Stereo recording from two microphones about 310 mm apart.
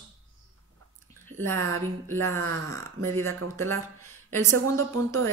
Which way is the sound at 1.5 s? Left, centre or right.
Right.